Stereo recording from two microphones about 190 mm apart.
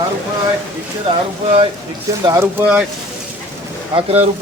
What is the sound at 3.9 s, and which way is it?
Speech, 30° right (ahead or behind).